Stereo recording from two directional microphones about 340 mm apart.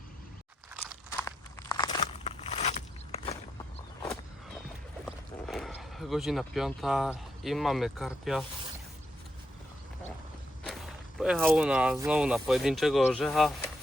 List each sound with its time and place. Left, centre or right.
1.2 s a sound: centre
5.0 s speech: centre
11.2 s speech: centre